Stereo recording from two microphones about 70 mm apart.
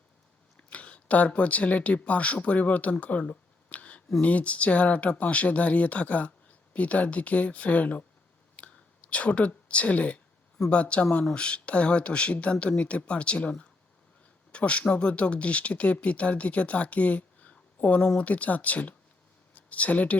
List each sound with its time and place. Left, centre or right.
0.7 s speech: centre
8.5 s a sound: centre
10.7 s speech: centre